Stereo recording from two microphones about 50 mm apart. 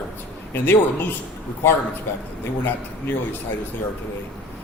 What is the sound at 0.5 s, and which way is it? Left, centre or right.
Speech, left.